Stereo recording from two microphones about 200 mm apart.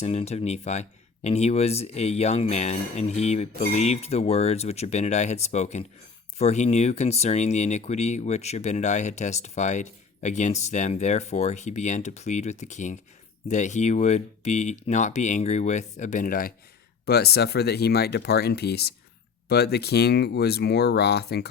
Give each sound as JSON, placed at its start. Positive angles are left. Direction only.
{"t": 0.0, "sound": "speech", "side_deg": 30}